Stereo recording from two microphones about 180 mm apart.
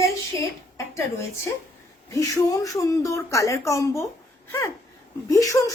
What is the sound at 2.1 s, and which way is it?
Speech, 20° left (ahead or behind).